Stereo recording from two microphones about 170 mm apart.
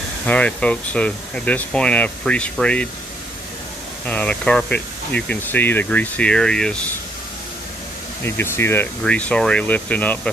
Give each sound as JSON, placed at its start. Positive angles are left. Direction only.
{"t": 0.3, "sound": "speech", "side_deg": 5}
{"t": 4.1, "sound": "speech", "side_deg": 5}
{"t": 8.2, "sound": "speech", "side_deg": 15}